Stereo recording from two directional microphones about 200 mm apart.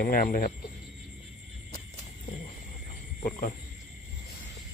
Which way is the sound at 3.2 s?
40° left (ahead or behind).